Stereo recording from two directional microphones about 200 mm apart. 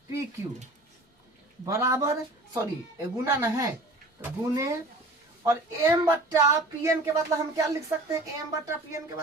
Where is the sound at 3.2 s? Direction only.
15° right (ahead or behind).